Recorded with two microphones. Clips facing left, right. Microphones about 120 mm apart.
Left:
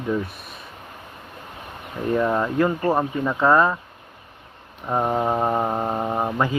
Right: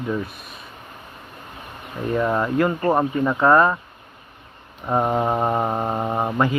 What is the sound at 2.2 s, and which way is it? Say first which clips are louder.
Speech: right 1 dB; 5° right (ahead or behind).